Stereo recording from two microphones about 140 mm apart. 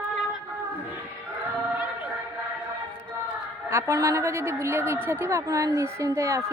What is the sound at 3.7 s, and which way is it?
A woman's voice, 20° right (ahead or behind).